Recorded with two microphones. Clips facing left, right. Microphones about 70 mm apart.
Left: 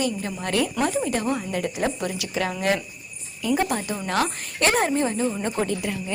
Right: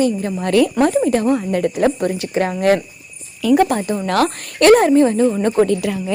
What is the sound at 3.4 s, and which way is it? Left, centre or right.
Speech, right.